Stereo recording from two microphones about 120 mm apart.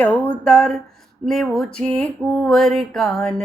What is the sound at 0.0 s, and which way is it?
Music, 10° left (ahead or behind).